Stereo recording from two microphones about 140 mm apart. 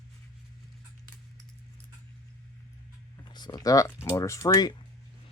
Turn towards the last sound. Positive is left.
turn(degrees=25)  # may be behind; listen again after turning